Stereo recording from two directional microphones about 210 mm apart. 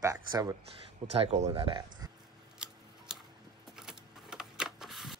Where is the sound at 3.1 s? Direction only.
5° right (ahead or behind).